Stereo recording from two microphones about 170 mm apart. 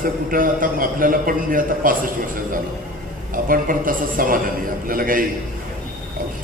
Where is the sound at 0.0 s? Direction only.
55° right (ahead or behind).